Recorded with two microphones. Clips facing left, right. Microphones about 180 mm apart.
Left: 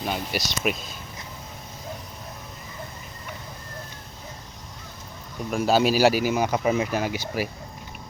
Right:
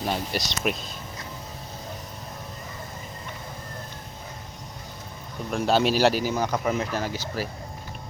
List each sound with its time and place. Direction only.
0.0 s speech: 5° left (ahead or behind)
5.5 s speech: 5° left (ahead or behind)